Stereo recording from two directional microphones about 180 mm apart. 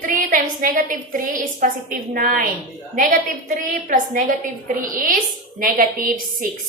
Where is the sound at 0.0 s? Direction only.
50° right (ahead or behind).